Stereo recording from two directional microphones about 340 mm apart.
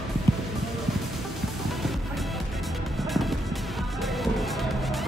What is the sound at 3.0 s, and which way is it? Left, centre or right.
Music, centre.